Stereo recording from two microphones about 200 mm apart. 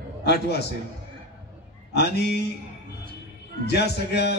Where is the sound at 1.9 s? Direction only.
55° left (ahead or behind).